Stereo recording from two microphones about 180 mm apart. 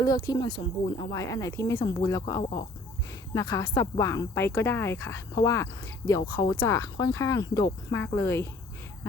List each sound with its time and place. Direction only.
0.0 s speech: 20° left (ahead or behind)
2.4 s speech: 30° left (ahead or behind)
3.3 s speech: 20° left (ahead or behind)